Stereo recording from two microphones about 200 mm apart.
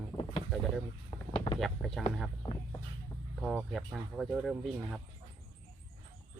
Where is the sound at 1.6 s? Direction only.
Centre (ahead or behind).